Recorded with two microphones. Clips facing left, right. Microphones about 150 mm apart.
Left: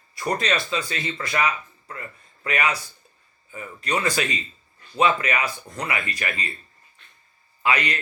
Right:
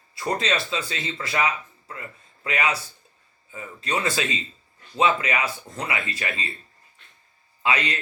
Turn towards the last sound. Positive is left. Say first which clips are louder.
# left 1 dB
turn(degrees=-25)  # may be behind; listen again after turning